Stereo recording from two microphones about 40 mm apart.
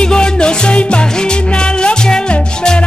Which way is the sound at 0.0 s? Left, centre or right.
Left.